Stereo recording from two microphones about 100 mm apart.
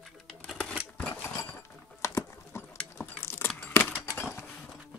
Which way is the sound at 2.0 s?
25° left (ahead or behind).